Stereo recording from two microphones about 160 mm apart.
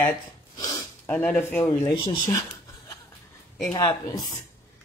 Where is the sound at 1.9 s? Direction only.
30° left (ahead or behind).